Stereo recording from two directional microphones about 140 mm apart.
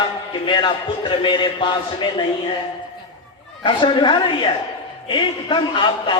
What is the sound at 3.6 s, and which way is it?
A man's voice, 35° left (ahead or behind).